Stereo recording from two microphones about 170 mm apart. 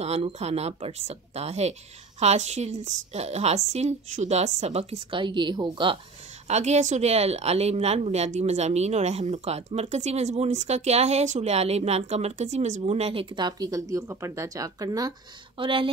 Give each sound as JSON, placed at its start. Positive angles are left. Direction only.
{"t": 0.0, "sound": "a woman's voice", "side_deg": -40}
{"t": 6.4, "sound": "a woman's voice", "side_deg": -40}